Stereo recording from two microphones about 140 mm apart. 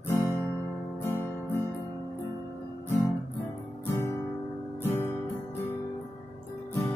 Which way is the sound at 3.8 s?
20° left (ahead or behind).